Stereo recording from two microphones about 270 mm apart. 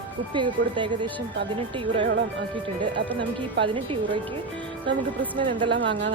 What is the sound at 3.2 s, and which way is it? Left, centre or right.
Speech, centre.